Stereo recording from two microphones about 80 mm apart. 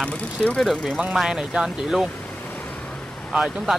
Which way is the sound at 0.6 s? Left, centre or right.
Centre.